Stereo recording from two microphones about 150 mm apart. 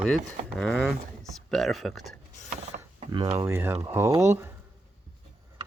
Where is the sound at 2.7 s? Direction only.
65° right (ahead or behind).